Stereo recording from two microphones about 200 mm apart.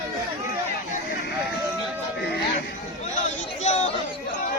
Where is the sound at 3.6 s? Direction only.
35° left (ahead or behind).